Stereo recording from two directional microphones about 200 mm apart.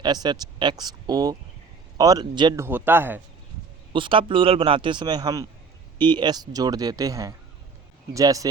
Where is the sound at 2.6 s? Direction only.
10° right (ahead or behind).